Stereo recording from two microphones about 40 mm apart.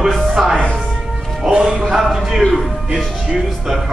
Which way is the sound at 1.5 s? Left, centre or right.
Right.